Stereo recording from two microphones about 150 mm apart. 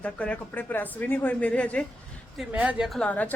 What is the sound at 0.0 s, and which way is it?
Speech, 10° left (ahead or behind).